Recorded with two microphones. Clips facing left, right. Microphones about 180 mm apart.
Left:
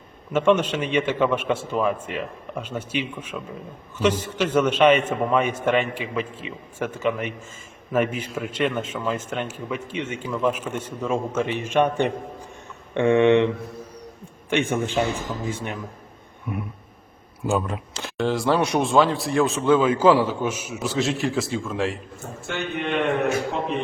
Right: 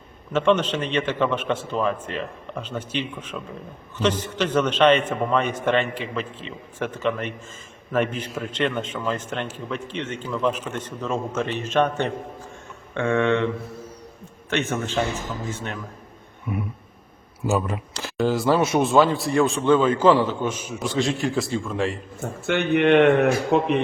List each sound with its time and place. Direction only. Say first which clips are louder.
0.3 s a man's voice: left 1 dB; 10° left (ahead or behind)
14.5 s a man's voice: left 2 dB; 10° left (ahead or behind)
16.5 s speech: right 2 dB; 5° right (ahead or behind)
22.4 s a man's voice: right 9 dB; 65° right (ahead or behind)